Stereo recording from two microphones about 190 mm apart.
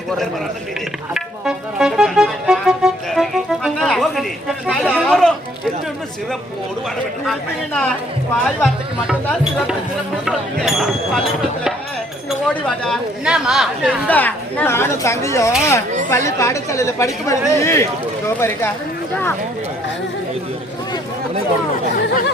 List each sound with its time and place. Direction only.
1.1 s music: 5° right (ahead or behind)
7.3 s a woman's voice: 5° left (ahead or behind)
12.5 s speech: 5° left (ahead or behind)
14.1 s a woman's voice: 10° left (ahead or behind)
21.9 s speech: 50° left (ahead or behind)